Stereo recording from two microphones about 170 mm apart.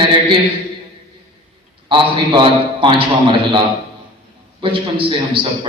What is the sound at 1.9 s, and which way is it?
A man's voice, 30° right (ahead or behind).